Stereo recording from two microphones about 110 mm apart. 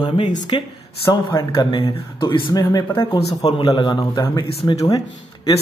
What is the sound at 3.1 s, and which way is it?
Speech, 70° left (ahead or behind).